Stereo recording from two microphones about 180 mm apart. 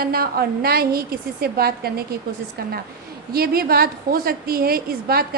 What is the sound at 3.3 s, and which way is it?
A woman's voice, 55° right (ahead or behind).